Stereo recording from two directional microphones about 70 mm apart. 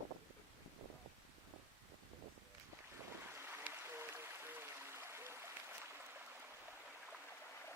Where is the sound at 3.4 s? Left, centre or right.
Right.